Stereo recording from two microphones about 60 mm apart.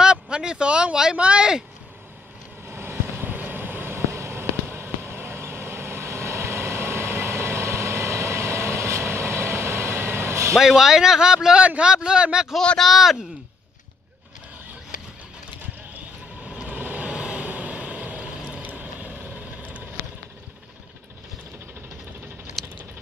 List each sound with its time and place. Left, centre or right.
0.0 s speech: centre
2.7 s vehicle: right
4.0 s vehicle: right
10.6 s speech: centre
12.5 s speech: centre
16.4 s vehicle: centre
22.6 s a sound: centre